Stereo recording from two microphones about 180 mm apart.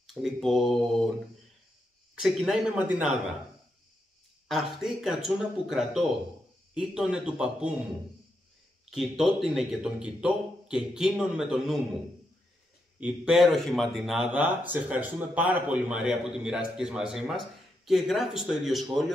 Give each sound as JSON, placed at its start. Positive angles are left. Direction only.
{"t": 0.1, "sound": "speech", "side_deg": 0}
{"t": 2.2, "sound": "speech", "side_deg": 0}
{"t": 4.5, "sound": "speech", "side_deg": 0}
{"t": 8.9, "sound": "speech", "side_deg": 0}
{"t": 13.0, "sound": "speech", "side_deg": -5}